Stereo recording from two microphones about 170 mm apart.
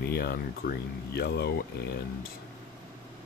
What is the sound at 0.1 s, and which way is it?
Speech, 65° left (ahead or behind).